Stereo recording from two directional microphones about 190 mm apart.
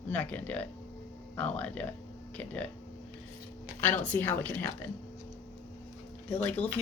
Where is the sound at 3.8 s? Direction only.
10° left (ahead or behind).